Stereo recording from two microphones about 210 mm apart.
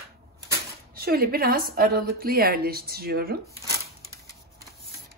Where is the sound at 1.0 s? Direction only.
45° right (ahead or behind).